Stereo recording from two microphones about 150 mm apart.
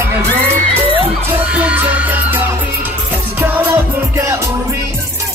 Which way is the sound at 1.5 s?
10° right (ahead or behind).